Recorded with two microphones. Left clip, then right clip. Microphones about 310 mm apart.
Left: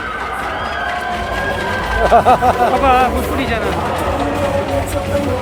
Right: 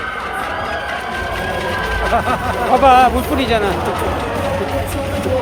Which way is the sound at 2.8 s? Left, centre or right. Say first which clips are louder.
Right 3 dB; right.